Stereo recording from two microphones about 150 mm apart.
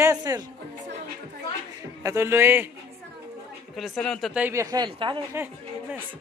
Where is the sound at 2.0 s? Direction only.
20° right (ahead or behind).